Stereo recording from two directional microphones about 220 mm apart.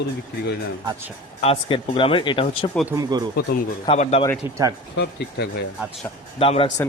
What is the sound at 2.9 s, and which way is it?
Speech, 15° right (ahead or behind).